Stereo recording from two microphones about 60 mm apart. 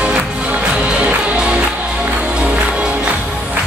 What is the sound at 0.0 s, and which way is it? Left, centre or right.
Music, centre.